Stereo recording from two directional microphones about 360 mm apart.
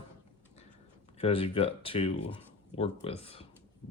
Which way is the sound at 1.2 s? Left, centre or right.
Centre.